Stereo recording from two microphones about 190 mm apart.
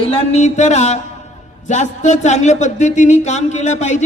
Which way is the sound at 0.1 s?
30° left (ahead or behind).